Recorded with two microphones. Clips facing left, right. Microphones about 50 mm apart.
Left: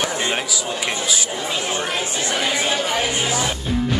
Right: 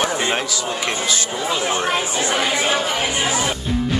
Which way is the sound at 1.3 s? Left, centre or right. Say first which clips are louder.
Right 3 dB; centre.